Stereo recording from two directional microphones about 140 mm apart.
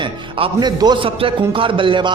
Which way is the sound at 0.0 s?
40° right (ahead or behind).